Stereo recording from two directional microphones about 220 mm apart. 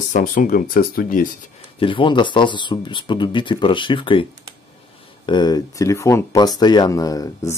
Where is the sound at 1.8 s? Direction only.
20° left (ahead or behind).